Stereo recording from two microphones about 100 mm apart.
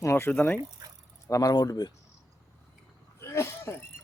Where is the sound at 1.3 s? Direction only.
35° left (ahead or behind).